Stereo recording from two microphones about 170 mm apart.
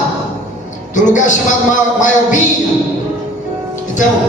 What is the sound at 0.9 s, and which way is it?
A man's voice, 45° left (ahead or behind).